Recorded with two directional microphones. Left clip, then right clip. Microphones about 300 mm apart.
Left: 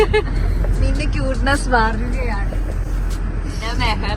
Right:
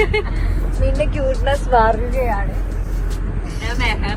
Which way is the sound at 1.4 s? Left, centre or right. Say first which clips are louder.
Right 1 dB; centre.